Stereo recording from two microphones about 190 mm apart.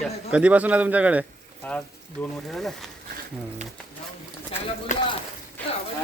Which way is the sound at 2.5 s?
Centre (ahead or behind).